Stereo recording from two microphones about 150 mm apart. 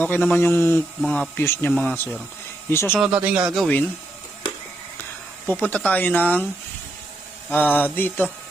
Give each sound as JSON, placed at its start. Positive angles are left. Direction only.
{"t": 0.3, "sound": "speech", "side_deg": 15}
{"t": 1.0, "sound": "speech", "side_deg": 0}
{"t": 1.4, "sound": "speech", "side_deg": 15}
{"t": 3.0, "sound": "speech", "side_deg": -10}
{"t": 3.5, "sound": "speech", "side_deg": 5}
{"t": 5.5, "sound": "speech", "side_deg": 10}
{"t": 7.5, "sound": "speech", "side_deg": 10}